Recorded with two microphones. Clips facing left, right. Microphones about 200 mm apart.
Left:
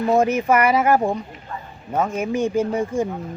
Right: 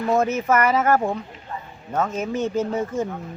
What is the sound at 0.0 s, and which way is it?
Speech, 15° left (ahead or behind).